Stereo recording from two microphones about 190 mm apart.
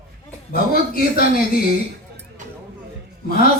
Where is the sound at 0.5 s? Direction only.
50° left (ahead or behind).